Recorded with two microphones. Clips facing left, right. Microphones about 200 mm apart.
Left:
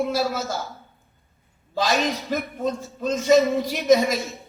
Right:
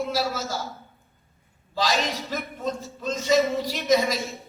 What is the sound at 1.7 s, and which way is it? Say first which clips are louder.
A man's voice: left 3 dB; 50° left (ahead or behind).